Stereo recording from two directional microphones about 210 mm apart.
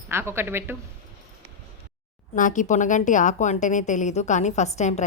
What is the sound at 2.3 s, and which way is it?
A woman's voice, 35° left (ahead or behind).